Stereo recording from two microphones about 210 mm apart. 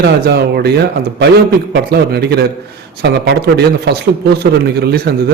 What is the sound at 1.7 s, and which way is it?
A man's voice, 50° right (ahead or behind).